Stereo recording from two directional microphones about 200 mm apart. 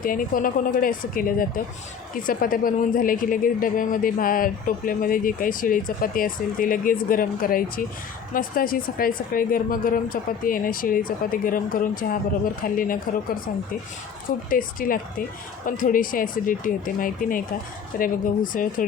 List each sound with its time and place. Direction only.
0.0 s speech: 45° left (ahead or behind)
14.5 s speech: 45° left (ahead or behind)